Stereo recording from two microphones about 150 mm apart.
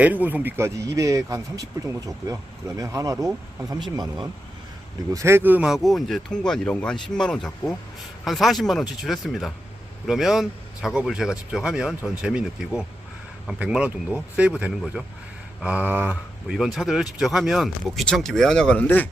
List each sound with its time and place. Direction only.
0.0 s speech: 10° right (ahead or behind)
16.6 s speech: centre (ahead or behind)